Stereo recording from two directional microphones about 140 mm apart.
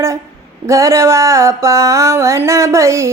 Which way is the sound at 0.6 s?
20° right (ahead or behind).